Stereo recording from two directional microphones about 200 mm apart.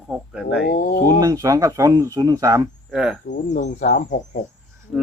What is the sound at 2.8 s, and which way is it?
Speech, 5° right (ahead or behind).